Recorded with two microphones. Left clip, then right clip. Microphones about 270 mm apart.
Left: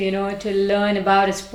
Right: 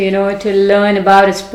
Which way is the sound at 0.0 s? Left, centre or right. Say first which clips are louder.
Right 9 dB; left.